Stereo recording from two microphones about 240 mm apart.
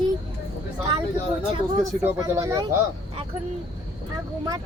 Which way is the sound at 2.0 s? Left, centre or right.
Centre.